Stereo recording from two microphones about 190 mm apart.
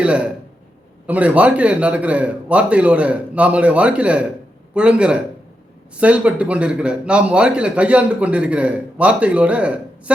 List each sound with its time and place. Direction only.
0.0 s a man's voice: 5° right (ahead or behind)